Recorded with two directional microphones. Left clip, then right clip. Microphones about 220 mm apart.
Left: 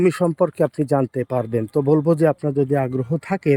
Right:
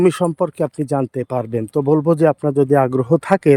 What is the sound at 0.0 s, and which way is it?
Speech, 10° right (ahead or behind).